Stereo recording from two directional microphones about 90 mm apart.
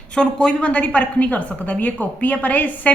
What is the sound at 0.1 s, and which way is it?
A woman's voice, 10° left (ahead or behind).